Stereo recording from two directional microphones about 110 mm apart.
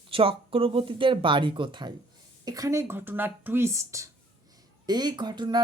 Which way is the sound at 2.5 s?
30° right (ahead or behind).